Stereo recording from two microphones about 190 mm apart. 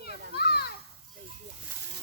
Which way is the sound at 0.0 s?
55° left (ahead or behind).